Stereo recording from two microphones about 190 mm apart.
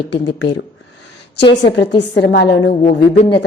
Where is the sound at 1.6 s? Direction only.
65° left (ahead or behind).